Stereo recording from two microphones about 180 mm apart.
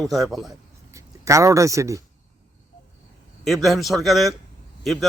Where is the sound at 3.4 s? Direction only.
Centre (ahead or behind).